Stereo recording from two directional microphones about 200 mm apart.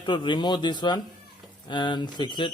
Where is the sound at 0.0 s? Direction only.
25° left (ahead or behind).